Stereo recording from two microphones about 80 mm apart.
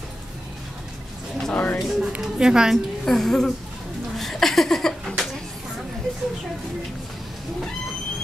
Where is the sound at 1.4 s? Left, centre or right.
Centre.